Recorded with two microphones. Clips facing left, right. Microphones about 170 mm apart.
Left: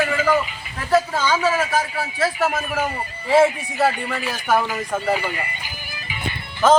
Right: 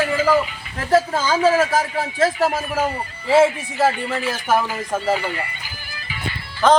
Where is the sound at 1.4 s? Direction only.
45° right (ahead or behind).